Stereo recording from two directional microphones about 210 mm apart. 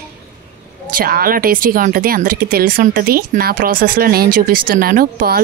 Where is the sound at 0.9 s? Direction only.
45° right (ahead or behind).